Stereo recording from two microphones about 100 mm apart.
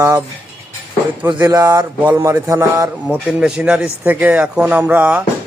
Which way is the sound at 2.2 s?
30° right (ahead or behind).